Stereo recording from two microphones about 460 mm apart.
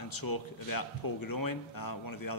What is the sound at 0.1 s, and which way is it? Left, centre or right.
A man's voice, left.